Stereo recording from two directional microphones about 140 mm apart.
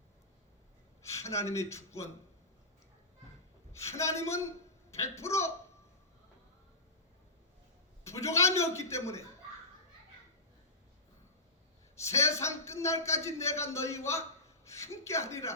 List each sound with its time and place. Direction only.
1.1 s speech: 20° left (ahead or behind)
3.7 s a man's voice: 20° left (ahead or behind)
8.0 s a man's voice: 20° left (ahead or behind)
11.9 s a man's voice: 20° left (ahead or behind)